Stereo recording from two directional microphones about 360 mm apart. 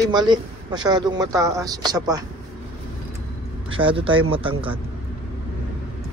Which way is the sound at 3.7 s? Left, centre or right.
Centre.